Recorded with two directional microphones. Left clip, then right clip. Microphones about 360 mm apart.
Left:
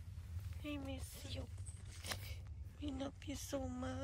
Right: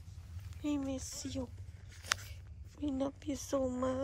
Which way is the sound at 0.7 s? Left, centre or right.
Centre.